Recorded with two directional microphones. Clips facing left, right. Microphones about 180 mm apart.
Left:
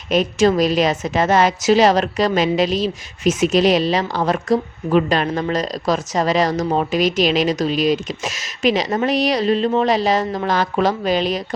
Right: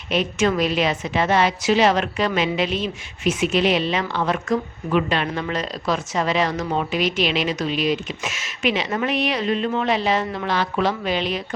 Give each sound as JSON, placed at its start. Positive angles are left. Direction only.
{"t": 0.1, "sound": "a woman's voice", "side_deg": 40}